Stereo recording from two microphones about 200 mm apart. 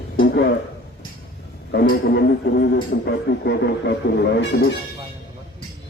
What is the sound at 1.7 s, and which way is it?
Speech, 55° left (ahead or behind).